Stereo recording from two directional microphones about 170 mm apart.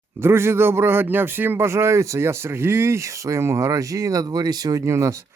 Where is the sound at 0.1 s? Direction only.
15° right (ahead or behind).